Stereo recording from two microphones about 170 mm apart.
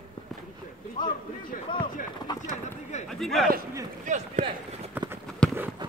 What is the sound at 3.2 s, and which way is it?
Speech, centre (ahead or behind).